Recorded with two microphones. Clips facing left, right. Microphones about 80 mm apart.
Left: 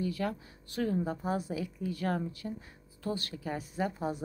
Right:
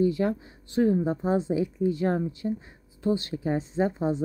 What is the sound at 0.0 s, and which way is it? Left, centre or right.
A woman's voice, right.